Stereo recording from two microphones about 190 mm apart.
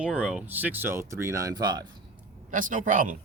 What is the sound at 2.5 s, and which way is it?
Speech, 45° right (ahead or behind).